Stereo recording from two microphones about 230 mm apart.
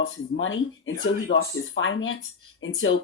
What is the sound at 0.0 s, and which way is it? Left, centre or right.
Speech, left.